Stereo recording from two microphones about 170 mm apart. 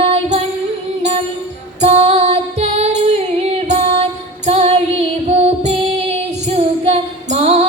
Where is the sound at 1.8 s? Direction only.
35° right (ahead or behind).